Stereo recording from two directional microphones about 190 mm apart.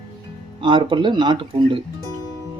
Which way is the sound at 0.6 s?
25° right (ahead or behind).